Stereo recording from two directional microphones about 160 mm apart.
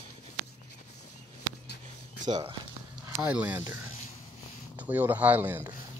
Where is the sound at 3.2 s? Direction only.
10° right (ahead or behind).